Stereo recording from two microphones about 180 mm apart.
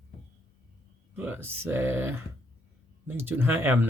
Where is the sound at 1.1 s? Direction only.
10° right (ahead or behind).